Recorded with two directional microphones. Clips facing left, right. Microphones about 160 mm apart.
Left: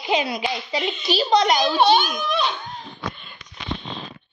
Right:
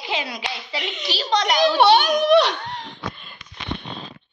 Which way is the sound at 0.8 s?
85° right.